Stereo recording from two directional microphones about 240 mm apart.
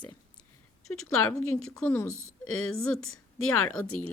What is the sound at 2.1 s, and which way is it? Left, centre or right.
A woman's voice, left.